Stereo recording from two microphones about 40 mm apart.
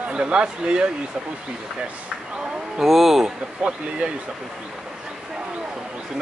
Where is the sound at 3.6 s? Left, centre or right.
Right.